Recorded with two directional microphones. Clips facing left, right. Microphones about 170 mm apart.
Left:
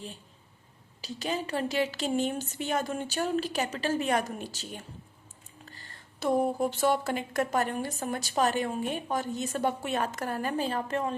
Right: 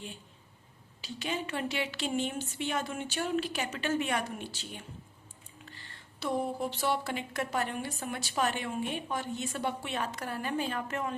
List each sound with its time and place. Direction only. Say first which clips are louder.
1.0 s speech: left 3 dB; 40° left (ahead or behind)